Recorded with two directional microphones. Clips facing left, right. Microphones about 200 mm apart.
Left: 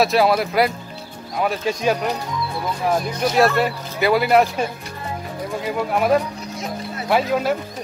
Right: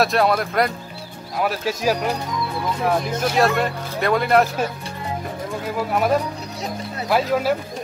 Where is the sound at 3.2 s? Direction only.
Centre (ahead or behind).